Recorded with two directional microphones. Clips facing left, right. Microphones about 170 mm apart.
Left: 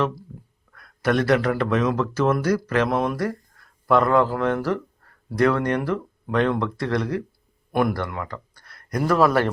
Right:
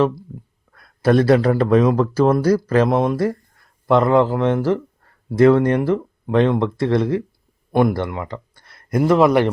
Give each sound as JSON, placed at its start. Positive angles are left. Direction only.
{"t": 0.7, "sound": "speech", "side_deg": -30}